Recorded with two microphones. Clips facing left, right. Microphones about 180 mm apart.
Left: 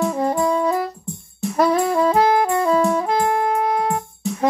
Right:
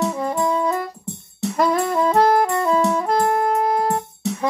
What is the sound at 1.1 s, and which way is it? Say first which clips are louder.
Music: even; 70° right (ahead or behind).